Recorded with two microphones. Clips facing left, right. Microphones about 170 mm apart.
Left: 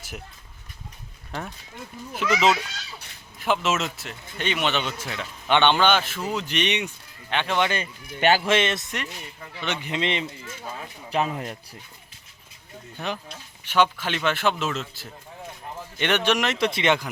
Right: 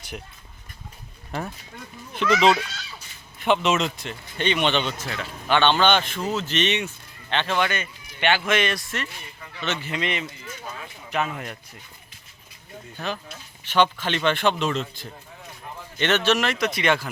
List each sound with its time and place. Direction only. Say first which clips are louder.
1.3 s a man's voice: right 3 dB; 5° right (ahead or behind); by 7.7 s 15° left (ahead or behind)
7.7 s speech: left 2 dB; 35° left (ahead or behind)
8.4 s speech: left 1 dB; 25° left (ahead or behind)
13.7 s a man's voice: right 1 dB; 10° left (ahead or behind)
16.6 s speech: left 1 dB; 25° left (ahead or behind)